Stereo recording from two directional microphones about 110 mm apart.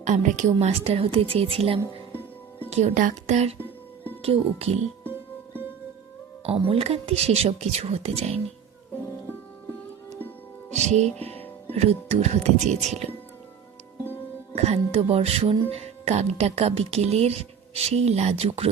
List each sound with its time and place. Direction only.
0.0 s a woman's voice: 90° right; by 1.8 s 60° right (ahead or behind)
2.6 s speech: 85° right
4.2 s a woman's voice: 60° right (ahead or behind)
6.4 s speech: 60° right (ahead or behind)
10.7 s music: 90° right
11.7 s speech: 70° right (ahead or behind); by 13.0 s 90° right
14.5 s speech: 70° right (ahead or behind)
15.7 s speech: 75° right (ahead or behind)